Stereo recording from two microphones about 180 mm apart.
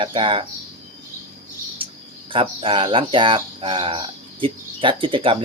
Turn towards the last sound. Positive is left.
turn(degrees=-30)  # may be behind; listen again after turning